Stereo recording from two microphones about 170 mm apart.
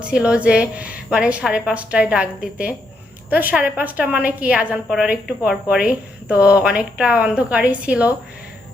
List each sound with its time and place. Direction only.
0.0 s a woman's voice: 5° right (ahead or behind)